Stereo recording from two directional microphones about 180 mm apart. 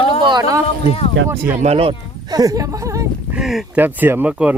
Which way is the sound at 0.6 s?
35° left (ahead or behind).